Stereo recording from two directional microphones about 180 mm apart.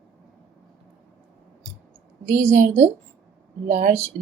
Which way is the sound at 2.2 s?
45° right (ahead or behind).